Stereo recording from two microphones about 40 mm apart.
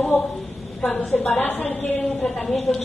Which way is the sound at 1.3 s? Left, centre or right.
Left.